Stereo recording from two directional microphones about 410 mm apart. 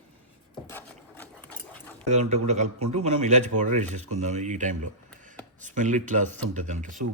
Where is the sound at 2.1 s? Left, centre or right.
Centre.